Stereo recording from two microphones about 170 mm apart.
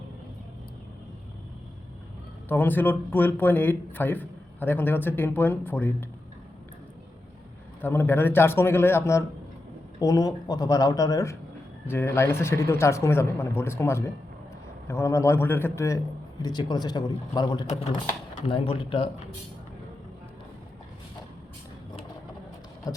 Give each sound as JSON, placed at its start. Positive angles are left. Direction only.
{"t": 2.5, "sound": "speech", "side_deg": 10}
{"t": 7.8, "sound": "speech", "side_deg": 10}
{"t": 22.8, "sound": "speech", "side_deg": 20}